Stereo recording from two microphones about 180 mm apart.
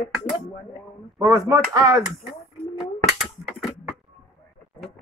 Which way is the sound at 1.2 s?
20° right (ahead or behind).